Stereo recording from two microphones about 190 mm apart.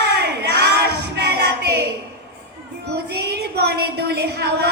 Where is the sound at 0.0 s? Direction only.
60° right (ahead or behind).